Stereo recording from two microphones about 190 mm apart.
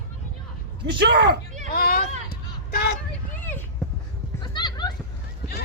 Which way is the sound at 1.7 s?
55° left (ahead or behind).